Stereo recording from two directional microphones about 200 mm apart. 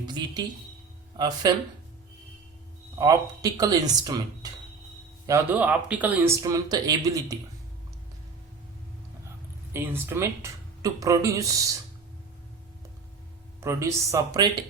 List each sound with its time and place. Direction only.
0.0 s speech: 20° right (ahead or behind)
3.0 s speech: 20° right (ahead or behind)
5.2 s speech: 15° right (ahead or behind)
9.7 s speech: 10° right (ahead or behind)
13.6 s speech: 15° right (ahead or behind)